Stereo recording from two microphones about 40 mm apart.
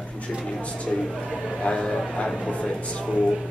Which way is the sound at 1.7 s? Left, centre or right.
Centre.